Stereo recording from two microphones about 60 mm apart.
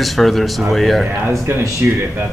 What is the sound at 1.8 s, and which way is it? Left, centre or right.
Speech, right.